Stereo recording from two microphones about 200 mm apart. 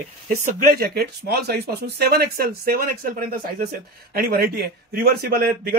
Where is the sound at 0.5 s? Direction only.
50° right (ahead or behind).